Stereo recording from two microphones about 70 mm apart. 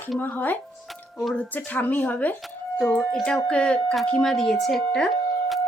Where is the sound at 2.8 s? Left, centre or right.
Centre.